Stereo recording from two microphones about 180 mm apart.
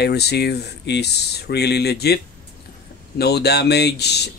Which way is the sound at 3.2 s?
65° left (ahead or behind).